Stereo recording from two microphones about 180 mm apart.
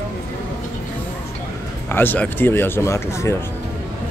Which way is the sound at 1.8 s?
10° left (ahead or behind).